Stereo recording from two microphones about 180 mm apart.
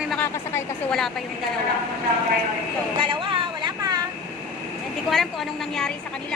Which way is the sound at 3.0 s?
30° right (ahead or behind).